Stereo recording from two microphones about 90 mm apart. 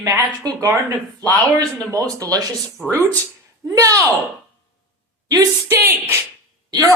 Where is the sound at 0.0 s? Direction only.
35° right (ahead or behind).